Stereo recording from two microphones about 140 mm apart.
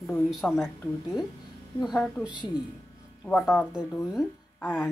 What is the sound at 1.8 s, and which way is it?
Speech, 5° left (ahead or behind).